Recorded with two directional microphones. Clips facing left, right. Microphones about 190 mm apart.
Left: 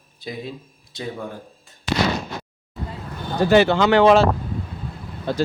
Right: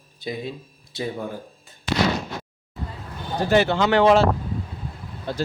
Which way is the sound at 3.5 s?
90° left.